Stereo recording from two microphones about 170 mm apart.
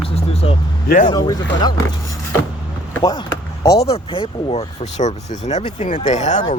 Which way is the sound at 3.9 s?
35° left (ahead or behind).